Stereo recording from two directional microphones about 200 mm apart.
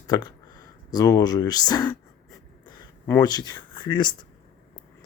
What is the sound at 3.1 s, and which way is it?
Speech, 20° left (ahead or behind).